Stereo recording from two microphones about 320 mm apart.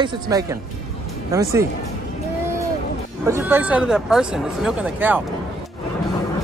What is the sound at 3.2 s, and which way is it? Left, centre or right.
Speech, centre.